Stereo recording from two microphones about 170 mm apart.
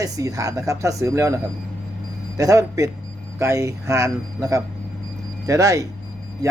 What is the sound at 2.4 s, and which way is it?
Speech, 20° right (ahead or behind).